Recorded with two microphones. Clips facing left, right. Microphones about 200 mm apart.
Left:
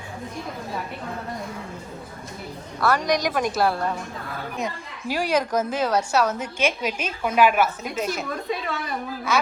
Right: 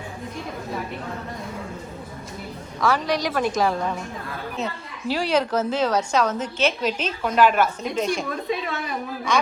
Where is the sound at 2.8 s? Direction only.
10° left (ahead or behind).